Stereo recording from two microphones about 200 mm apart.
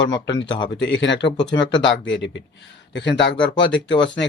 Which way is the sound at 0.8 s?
65° left (ahead or behind).